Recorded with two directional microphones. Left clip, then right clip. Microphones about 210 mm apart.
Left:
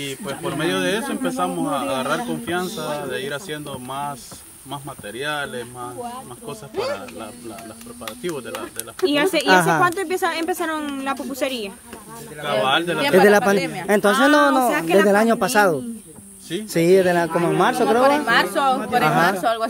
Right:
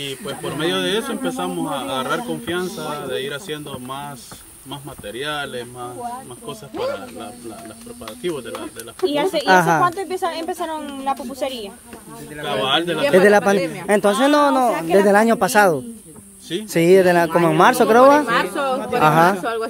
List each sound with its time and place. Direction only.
0.0 s speech: 10° left (ahead or behind)
9.0 s speech: 45° left (ahead or behind)
9.5 s speech: centre (ahead or behind)
9.8 s speech: 45° left (ahead or behind)
12.4 s speech: 5° left (ahead or behind)
14.8 s speech: 45° left (ahead or behind)
15.0 s speech: 5° right (ahead or behind)
18.2 s a woman's voice: 60° left (ahead or behind)
19.0 s speech: 20° right (ahead or behind)
19.4 s a woman's voice: 60° left (ahead or behind)